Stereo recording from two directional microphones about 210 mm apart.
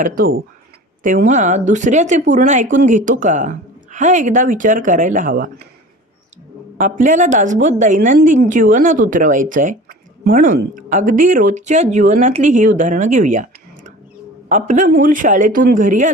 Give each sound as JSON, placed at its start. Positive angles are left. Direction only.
{"t": 0.0, "sound": "a woman's voice", "side_deg": -45}
{"t": 6.7, "sound": "a woman's voice", "side_deg": -40}